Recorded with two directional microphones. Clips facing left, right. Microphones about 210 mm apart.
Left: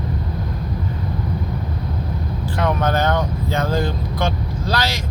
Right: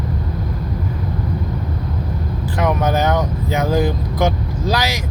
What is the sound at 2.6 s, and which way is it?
Speech, 15° right (ahead or behind).